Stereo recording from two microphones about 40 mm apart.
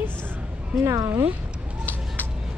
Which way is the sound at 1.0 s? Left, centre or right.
Right.